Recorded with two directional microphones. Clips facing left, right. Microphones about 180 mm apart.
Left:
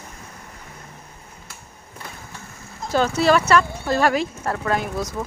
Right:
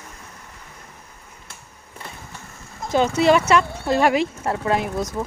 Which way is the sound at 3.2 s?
20° right (ahead or behind).